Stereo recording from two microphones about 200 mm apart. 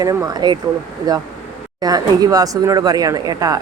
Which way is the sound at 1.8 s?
20° right (ahead or behind).